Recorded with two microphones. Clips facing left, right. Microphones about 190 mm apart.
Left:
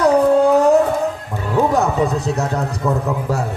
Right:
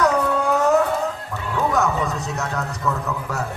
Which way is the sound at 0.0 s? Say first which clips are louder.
Left 7 dB; 35° left (ahead or behind).